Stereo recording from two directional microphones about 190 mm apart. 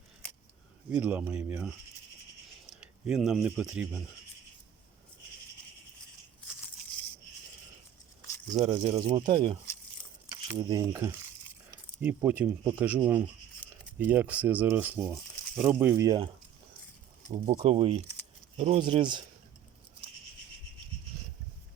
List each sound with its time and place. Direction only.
0.9 s speech: 10° right (ahead or behind)
8.5 s speech: 35° right (ahead or behind); by 13.2 s 10° right (ahead or behind)
13.6 s a sound: 10° left (ahead or behind)
14.0 s speech: 10° right (ahead or behind)
17.3 s speech: 40° right (ahead or behind)